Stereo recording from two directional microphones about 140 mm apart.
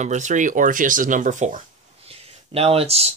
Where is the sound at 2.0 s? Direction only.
45° right (ahead or behind).